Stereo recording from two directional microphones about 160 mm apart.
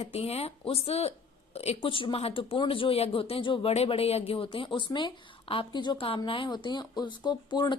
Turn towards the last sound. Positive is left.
turn(degrees=25)  # may be behind; listen again after turning